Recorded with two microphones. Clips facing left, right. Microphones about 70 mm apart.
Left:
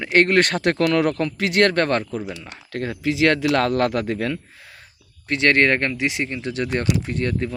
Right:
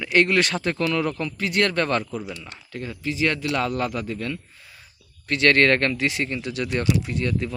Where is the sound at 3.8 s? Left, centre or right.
Left.